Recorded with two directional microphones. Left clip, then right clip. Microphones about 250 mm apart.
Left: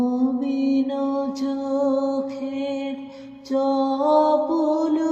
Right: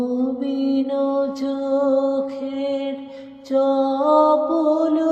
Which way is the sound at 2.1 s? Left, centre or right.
Right.